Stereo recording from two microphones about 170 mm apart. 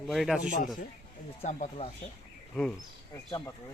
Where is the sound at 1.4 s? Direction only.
45° left (ahead or behind).